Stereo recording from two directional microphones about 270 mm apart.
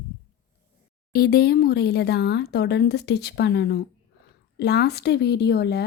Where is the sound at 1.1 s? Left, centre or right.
Left.